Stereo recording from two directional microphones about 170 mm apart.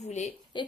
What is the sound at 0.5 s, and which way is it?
Speech, 25° left (ahead or behind).